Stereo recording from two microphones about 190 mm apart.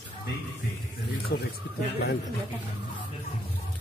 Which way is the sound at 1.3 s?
50° left (ahead or behind).